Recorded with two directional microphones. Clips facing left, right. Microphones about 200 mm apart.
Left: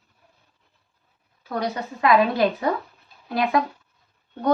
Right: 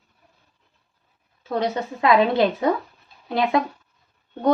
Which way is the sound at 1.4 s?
25° right (ahead or behind).